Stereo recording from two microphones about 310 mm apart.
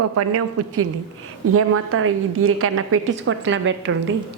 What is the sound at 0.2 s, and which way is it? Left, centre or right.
A woman's voice, right.